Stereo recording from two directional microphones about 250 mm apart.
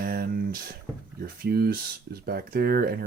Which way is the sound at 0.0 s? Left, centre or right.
Right.